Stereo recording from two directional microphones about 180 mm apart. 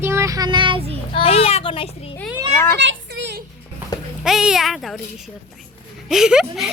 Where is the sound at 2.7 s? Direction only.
85° right.